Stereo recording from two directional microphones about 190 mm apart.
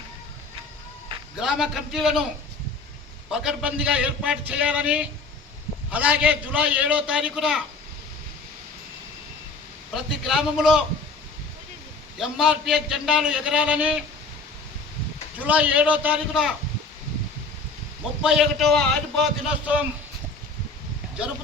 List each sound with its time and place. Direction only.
1.4 s a man's voice: 5° right (ahead or behind)
3.3 s a man's voice: 5° right (ahead or behind)
9.9 s a man's voice: centre (ahead or behind)
12.2 s a man's voice: centre (ahead or behind)
15.4 s a man's voice: 10° right (ahead or behind)
18.2 s a man's voice: centre (ahead or behind)